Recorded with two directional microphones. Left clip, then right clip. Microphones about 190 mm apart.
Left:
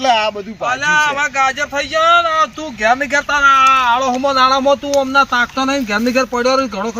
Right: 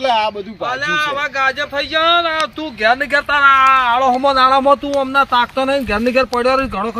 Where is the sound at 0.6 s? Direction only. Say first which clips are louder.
Left 4 dB; 15° right (ahead or behind).